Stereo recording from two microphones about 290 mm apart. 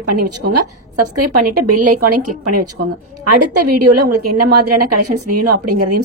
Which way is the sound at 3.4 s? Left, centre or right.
Right.